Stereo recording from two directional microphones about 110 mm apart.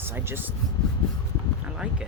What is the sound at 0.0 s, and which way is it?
Speech, 20° right (ahead or behind).